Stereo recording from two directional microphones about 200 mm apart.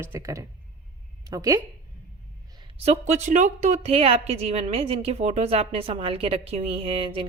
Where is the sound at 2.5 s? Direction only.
30° right (ahead or behind).